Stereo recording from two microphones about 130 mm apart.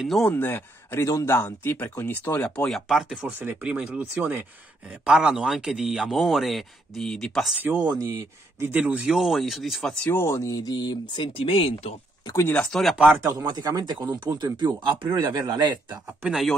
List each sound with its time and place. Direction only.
0.0 s speech: centre (ahead or behind)
0.3 s speech: 15° left (ahead or behind); by 4.5 s 15° right (ahead or behind)
5.0 s speech: 5° right (ahead or behind)
7.8 s speech: 30° right (ahead or behind)
8.5 s speech: 15° right (ahead or behind)
10.1 s speech: 20° left (ahead or behind); by 11.9 s 45° left (ahead or behind)
12.3 s speech: 20° left (ahead or behind)
12.6 s speech: centre (ahead or behind)
12.9 s speech: 10° right (ahead or behind)
13.4 s speech: 30° right (ahead or behind)